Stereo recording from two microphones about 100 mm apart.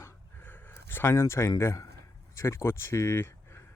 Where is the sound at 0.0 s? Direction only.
25° left (ahead or behind).